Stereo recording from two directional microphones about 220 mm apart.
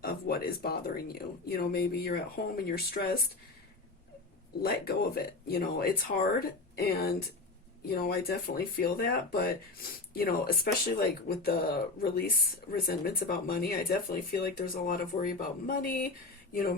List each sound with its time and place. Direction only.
0.0 s speech: 45° left (ahead or behind)
4.6 s speech: 45° left (ahead or behind)